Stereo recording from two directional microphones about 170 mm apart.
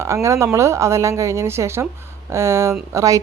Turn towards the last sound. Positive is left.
turn(degrees=-20)  # may be behind; listen again after turning